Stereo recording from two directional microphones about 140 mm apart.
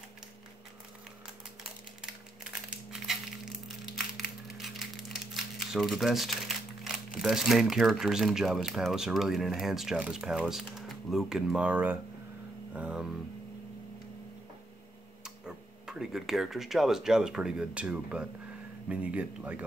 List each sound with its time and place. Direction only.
2.5 s crushing: 5° right (ahead or behind)
4.6 s speech: centre (ahead or behind)
15.2 s speech: 5° right (ahead or behind)